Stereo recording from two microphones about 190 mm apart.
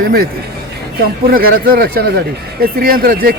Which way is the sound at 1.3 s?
50° right (ahead or behind).